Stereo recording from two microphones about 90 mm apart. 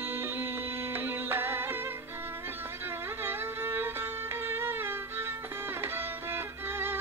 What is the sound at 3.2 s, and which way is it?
Music, 25° right (ahead or behind).